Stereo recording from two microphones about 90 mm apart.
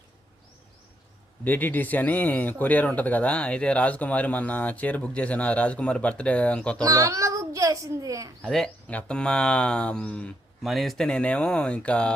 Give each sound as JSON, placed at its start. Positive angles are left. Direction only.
{"t": 1.5, "sound": "speech", "side_deg": 20}
{"t": 6.8, "sound": "a child's voice", "side_deg": -40}
{"t": 8.4, "sound": "speech", "side_deg": 5}
{"t": 10.6, "sound": "speech", "side_deg": 0}